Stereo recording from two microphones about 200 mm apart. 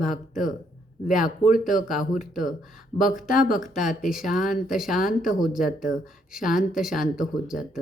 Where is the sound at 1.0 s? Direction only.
40° left (ahead or behind).